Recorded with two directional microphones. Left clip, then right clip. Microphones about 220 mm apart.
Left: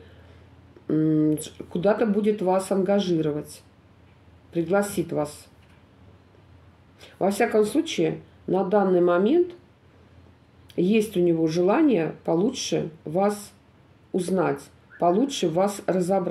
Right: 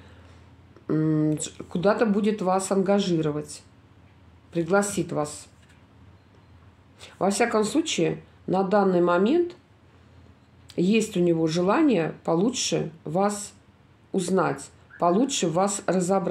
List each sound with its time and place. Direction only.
0.8 s speech: 40° right (ahead or behind)
7.0 s speech: 45° right (ahead or behind)
10.8 s speech: 45° right (ahead or behind)